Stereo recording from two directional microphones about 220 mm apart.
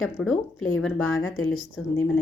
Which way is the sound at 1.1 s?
70° left (ahead or behind).